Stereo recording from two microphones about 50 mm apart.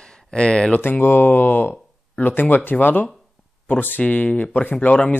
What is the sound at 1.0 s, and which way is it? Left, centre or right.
Speech, left.